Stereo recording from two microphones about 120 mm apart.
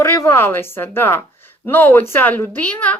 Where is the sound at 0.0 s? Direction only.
20° left (ahead or behind).